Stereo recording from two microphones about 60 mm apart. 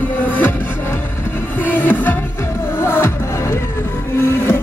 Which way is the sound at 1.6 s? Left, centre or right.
Left.